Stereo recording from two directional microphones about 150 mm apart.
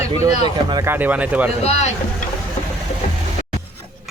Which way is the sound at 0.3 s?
30° right (ahead or behind).